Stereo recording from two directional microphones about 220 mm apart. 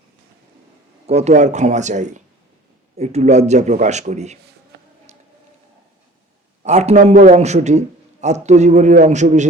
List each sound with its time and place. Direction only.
1.0 s a man's voice: 30° right (ahead or behind)
4.7 s a sound: 50° right (ahead or behind)
6.6 s a man's voice: 30° right (ahead or behind)